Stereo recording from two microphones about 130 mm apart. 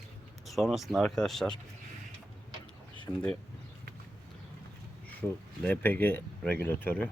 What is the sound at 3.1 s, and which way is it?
Speech, 10° left (ahead or behind).